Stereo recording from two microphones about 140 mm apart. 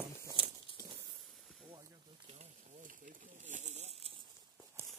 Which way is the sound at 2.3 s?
70° right (ahead or behind).